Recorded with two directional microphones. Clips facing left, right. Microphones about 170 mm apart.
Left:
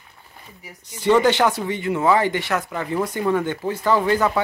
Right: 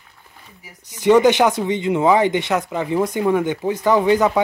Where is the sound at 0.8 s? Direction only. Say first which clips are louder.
Right 4 dB; 15° right (ahead or behind).